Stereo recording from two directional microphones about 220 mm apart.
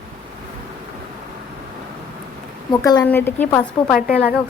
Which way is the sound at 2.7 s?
15° left (ahead or behind).